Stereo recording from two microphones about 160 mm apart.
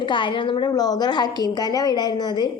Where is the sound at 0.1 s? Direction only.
30° left (ahead or behind).